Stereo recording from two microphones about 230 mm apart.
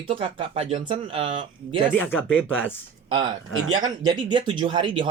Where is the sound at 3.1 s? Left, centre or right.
Centre.